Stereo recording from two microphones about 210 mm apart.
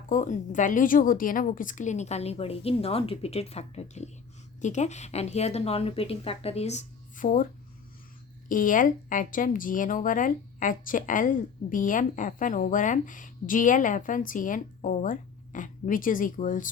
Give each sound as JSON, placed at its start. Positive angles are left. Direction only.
{"t": 0.1, "sound": "a woman's voice", "side_deg": 35}
{"t": 8.4, "sound": "a woman's voice", "side_deg": 40}